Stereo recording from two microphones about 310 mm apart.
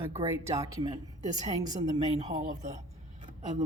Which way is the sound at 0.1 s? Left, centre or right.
Centre.